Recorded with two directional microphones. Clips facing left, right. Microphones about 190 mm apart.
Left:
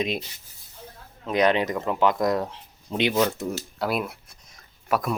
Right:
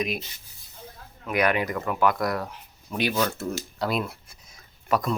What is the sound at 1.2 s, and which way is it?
Speech, 20° left (ahead or behind).